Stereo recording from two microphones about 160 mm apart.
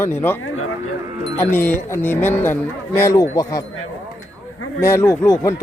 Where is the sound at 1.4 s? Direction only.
15° left (ahead or behind).